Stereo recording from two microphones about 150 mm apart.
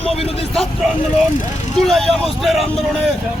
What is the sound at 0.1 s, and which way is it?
Speech, 40° left (ahead or behind).